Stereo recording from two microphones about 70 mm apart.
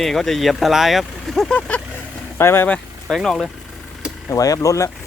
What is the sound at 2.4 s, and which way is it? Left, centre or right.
Speech, left.